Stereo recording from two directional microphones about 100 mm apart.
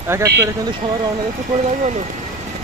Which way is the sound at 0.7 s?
55° right (ahead or behind).